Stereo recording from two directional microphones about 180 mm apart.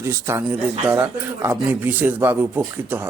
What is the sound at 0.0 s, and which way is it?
A man's voice, 15° right (ahead or behind).